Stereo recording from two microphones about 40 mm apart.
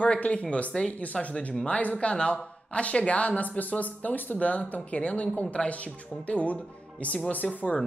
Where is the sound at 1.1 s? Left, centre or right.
Centre.